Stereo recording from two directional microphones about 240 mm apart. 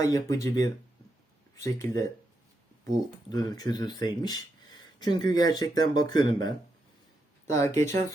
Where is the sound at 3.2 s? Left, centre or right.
Centre.